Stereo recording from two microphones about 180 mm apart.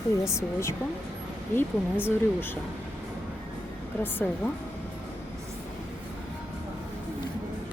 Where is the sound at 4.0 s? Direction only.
10° left (ahead or behind).